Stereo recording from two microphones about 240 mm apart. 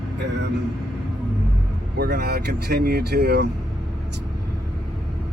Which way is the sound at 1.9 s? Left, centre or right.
Right.